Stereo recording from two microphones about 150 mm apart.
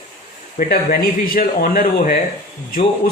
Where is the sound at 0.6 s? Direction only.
70° left (ahead or behind).